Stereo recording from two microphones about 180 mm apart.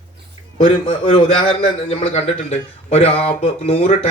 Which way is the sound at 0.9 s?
30° left (ahead or behind).